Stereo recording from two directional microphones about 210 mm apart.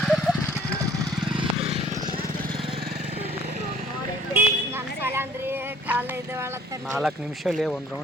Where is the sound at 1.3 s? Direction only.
30° right (ahead or behind).